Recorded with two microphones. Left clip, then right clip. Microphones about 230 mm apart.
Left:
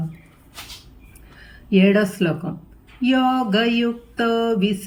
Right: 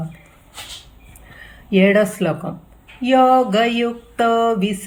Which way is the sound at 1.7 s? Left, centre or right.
Centre.